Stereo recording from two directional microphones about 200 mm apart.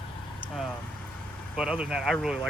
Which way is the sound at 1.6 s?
5° right (ahead or behind).